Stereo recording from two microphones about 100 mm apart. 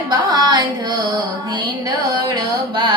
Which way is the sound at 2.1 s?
45° right (ahead or behind).